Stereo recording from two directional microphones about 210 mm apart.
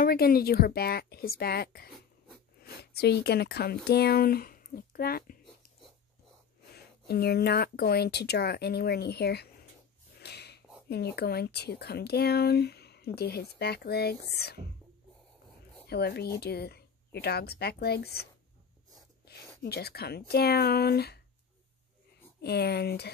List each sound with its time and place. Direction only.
0.0 s speech: 45° left (ahead or behind)
6.7 s speech: 50° left (ahead or behind)
10.2 s snort: 50° left (ahead or behind)
11.1 s speech: 50° left (ahead or behind)
15.9 s speech: 50° left (ahead or behind)
22.4 s speech: 50° left (ahead or behind)